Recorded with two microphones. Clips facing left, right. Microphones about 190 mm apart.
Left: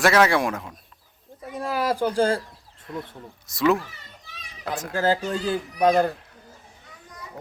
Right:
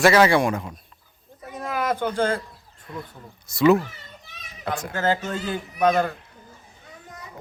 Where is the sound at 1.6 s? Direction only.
30° left (ahead or behind).